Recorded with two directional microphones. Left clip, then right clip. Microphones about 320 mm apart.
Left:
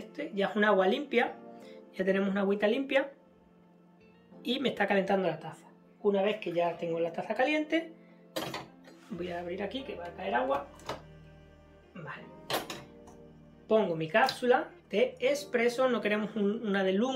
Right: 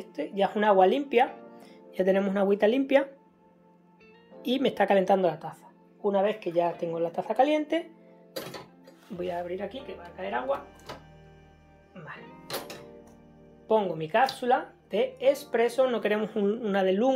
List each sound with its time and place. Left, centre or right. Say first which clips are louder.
0.1 s speech: right 5 dB; centre
4.4 s speech: right 5 dB; centre
9.2 s speech: right 4 dB; centre
12.3 s music: left 3 dB; centre
13.7 s speech: right 2 dB; centre